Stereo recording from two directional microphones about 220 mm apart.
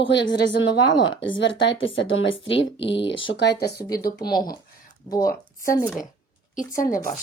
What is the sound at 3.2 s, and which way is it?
Speech, 50° left (ahead or behind).